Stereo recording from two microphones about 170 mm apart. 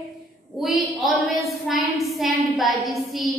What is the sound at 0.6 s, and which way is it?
A woman's voice, centre (ahead or behind).